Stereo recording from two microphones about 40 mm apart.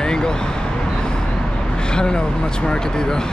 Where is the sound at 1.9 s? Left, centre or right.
Centre.